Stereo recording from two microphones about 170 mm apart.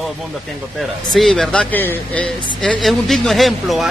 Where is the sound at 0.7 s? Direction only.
Centre (ahead or behind).